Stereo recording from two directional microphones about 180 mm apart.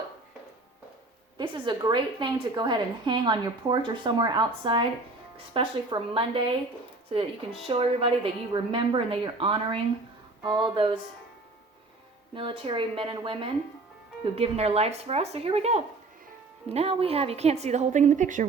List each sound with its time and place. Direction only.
1.4 s a woman's voice: 25° right (ahead or behind)
12.3 s a woman's voice: 30° right (ahead or behind)